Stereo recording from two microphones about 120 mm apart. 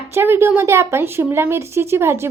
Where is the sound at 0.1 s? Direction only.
20° right (ahead or behind).